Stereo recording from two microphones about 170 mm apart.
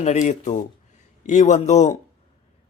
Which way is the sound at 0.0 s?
45° left (ahead or behind).